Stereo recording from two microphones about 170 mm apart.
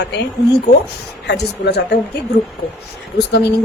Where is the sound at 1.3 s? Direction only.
80° left.